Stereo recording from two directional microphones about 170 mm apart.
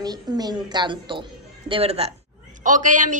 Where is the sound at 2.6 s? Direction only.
50° right (ahead or behind).